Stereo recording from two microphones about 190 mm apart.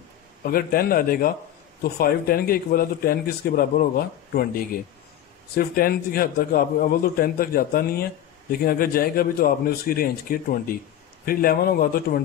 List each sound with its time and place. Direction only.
0.4 s a man's voice: 50° left (ahead or behind)